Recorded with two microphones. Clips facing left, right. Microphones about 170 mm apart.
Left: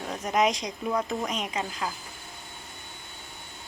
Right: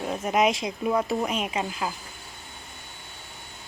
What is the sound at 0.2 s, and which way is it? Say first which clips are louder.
A woman's voice: right 1 dB; centre (ahead or behind).